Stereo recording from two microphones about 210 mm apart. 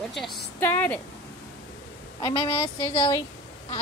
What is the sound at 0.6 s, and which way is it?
Speech, 10° left (ahead or behind).